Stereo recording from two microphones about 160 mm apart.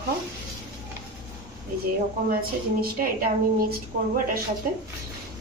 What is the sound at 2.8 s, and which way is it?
Speech, 65° right (ahead or behind).